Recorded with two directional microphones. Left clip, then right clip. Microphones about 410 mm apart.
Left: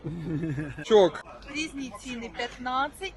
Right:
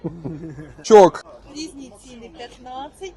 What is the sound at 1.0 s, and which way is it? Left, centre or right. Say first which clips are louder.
Speech: right 10 dB; right.